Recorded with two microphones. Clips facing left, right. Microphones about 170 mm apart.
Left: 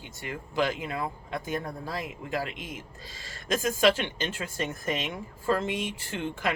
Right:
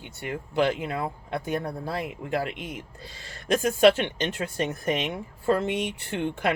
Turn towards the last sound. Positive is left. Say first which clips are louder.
# right 4 dB
turn(degrees=-60)  # may be behind; listen again after turning